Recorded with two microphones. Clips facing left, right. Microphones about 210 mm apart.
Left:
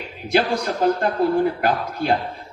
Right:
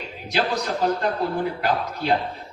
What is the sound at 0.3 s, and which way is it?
A man's voice, 50° left (ahead or behind).